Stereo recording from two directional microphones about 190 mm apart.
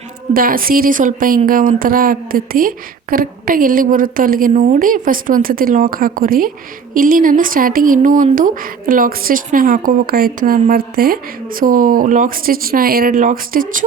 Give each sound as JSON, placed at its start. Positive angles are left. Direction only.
{"t": 0.3, "sound": "speech", "side_deg": -50}